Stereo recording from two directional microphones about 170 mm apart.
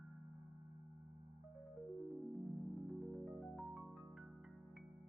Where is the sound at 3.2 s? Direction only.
Centre (ahead or behind).